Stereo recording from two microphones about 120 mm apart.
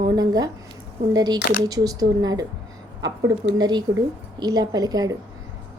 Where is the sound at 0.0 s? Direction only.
35° right (ahead or behind).